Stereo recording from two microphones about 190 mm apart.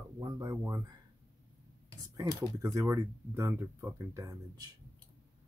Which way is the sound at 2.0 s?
20° right (ahead or behind).